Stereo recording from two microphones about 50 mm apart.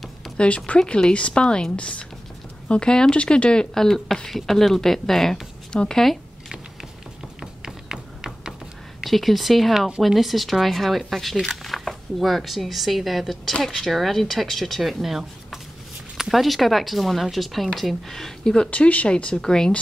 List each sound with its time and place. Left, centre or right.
0.4 s speech: centre
7.6 s a sound: centre
9.0 s speech: centre
18.7 s speech: left